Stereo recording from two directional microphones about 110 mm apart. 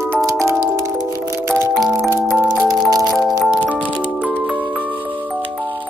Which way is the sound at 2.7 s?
35° right (ahead or behind).